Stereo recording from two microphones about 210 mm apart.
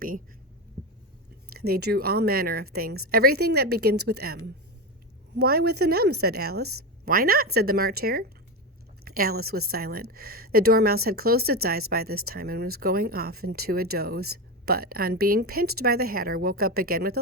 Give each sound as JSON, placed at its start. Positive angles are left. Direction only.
{"t": 1.5, "sound": "a woman's voice", "side_deg": -45}
{"t": 5.4, "sound": "a woman's voice", "side_deg": -50}